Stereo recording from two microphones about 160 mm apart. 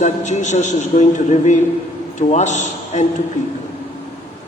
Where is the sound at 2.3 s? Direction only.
50° left (ahead or behind).